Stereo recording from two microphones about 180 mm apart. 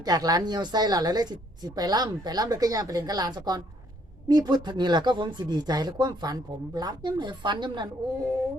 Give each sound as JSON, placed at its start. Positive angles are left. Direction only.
{"t": 0.0, "sound": "a woman's voice", "side_deg": -20}